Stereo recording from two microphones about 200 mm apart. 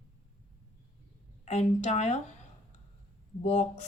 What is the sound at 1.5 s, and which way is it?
Speech, 35° left (ahead or behind).